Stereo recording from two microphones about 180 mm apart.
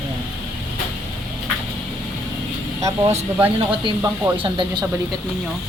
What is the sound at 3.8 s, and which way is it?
Speech, 25° right (ahead or behind).